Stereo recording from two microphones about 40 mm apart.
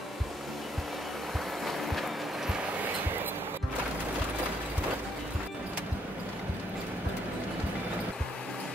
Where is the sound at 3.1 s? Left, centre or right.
Right.